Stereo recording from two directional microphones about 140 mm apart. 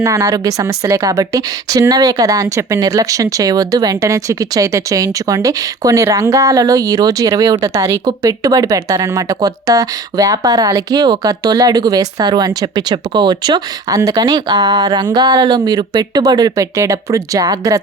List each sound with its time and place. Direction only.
0.0 s a woman's voice: 25° right (ahead or behind)